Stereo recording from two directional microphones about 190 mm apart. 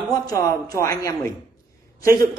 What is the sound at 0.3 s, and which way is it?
Speech, 20° left (ahead or behind).